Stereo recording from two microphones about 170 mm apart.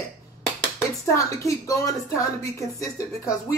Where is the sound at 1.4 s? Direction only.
20° left (ahead or behind).